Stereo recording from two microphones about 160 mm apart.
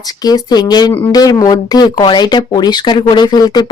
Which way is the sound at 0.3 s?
25° left (ahead or behind).